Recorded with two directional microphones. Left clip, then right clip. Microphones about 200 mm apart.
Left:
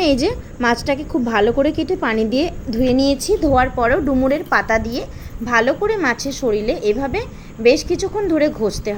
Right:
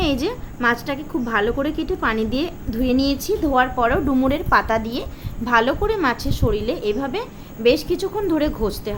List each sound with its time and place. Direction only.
0.0 s a woman's voice: 20° left (ahead or behind)